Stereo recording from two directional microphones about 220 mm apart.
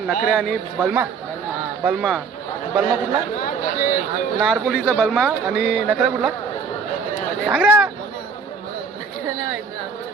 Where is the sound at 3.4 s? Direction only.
35° left (ahead or behind).